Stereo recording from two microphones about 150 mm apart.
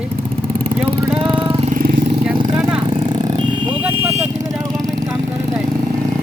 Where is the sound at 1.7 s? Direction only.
70° right (ahead or behind).